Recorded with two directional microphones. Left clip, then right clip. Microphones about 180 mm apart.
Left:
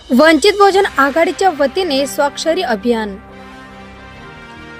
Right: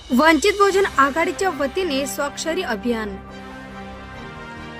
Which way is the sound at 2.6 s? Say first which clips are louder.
Left 7 dB; 25° left (ahead or behind).